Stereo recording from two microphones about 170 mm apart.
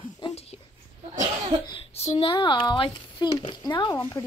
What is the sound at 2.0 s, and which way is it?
Speech, 35° left (ahead or behind).